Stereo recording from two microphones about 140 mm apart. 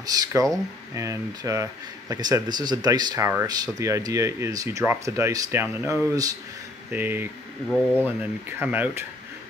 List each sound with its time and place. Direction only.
0.0 s speech: 25° right (ahead or behind)
7.7 s speech: 15° left (ahead or behind)
8.2 s speech: 15° right (ahead or behind)